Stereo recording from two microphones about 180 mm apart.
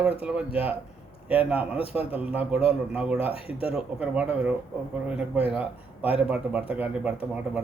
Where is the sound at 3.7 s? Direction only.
5° right (ahead or behind).